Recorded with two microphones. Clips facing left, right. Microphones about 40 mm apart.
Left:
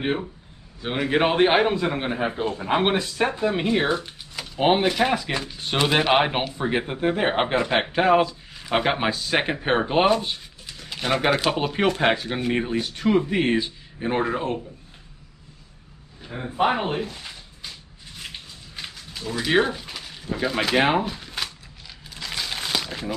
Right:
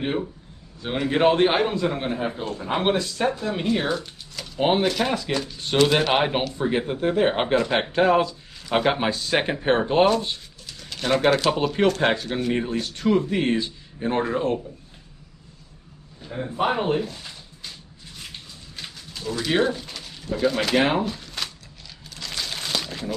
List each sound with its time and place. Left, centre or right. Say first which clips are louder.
0.0 s a man's voice: even; centre
16.2 s a man's voice: left 2 dB; centre
18.8 s a sound: left 1 dB; centre
22.1 s crumpling: left 1 dB; centre